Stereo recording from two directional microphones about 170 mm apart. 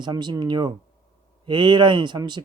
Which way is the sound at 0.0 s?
25° right (ahead or behind).